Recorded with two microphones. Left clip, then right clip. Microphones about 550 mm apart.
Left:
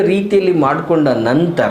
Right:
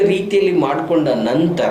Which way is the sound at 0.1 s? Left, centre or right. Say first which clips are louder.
Left 2 dB; left.